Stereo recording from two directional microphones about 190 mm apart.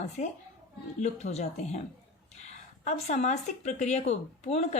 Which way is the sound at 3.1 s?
35° left (ahead or behind).